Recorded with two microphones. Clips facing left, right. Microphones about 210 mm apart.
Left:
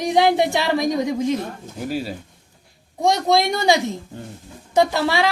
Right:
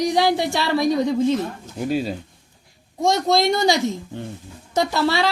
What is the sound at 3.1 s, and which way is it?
Speech, 15° left (ahead or behind).